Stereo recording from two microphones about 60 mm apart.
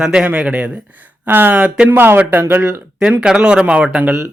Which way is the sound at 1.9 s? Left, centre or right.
Right.